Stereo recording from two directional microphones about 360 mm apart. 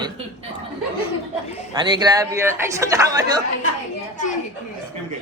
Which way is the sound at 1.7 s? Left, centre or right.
Centre.